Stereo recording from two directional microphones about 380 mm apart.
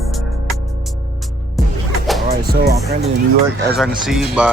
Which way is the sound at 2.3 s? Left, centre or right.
Right.